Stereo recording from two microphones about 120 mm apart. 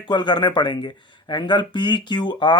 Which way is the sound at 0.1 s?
40° left (ahead or behind).